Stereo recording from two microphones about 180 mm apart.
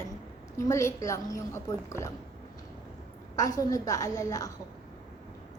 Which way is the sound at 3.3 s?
20° left (ahead or behind).